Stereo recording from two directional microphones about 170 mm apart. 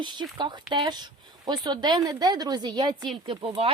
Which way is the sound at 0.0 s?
25° right (ahead or behind).